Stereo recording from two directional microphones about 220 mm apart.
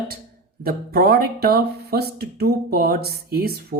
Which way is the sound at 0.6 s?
45° right (ahead or behind).